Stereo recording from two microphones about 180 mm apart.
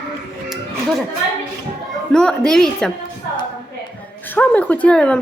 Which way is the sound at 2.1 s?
5° left (ahead or behind).